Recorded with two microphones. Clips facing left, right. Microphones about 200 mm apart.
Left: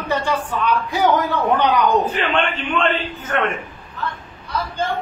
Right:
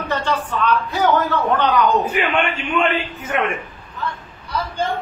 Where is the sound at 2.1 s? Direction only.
10° right (ahead or behind).